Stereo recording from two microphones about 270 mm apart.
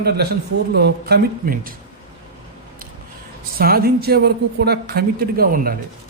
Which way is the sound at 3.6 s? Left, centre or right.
Right.